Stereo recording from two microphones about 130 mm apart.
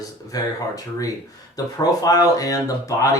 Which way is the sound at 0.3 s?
30° left (ahead or behind).